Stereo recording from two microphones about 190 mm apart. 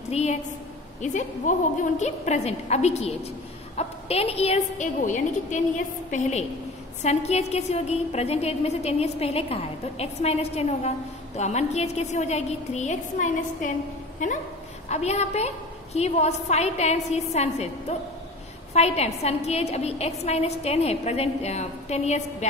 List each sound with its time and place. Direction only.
0.1 s a woman's voice: 35° left (ahead or behind)